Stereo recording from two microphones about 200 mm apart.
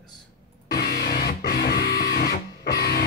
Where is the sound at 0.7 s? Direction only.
55° left (ahead or behind).